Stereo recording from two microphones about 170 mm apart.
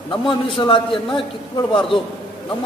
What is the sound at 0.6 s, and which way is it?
Speech, 25° left (ahead or behind).